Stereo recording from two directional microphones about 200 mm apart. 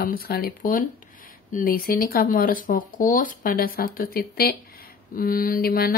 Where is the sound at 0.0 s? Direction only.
50° left (ahead or behind).